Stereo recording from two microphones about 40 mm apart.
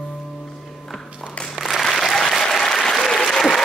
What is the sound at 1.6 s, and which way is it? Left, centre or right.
Applause, centre.